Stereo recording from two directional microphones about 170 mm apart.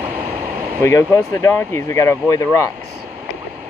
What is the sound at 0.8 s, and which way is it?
Speech, 15° left (ahead or behind).